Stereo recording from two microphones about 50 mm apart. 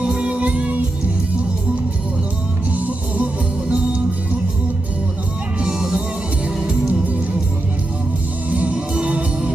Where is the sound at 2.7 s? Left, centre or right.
Right.